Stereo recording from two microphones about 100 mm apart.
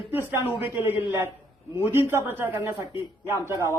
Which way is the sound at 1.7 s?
25° right (ahead or behind).